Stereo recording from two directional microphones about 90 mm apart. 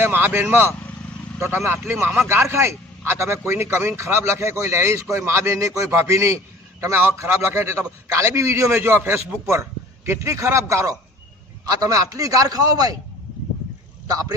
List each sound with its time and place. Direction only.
0.0 s a man's voice: 25° right (ahead or behind)
8.7 s a man's voice: 20° right (ahead or behind); by 13.0 s 45° right (ahead or behind)
14.1 s a man's voice: 40° right (ahead or behind)